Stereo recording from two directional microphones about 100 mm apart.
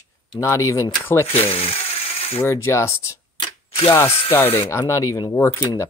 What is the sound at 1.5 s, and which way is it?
Speech, 70° left (ahead or behind).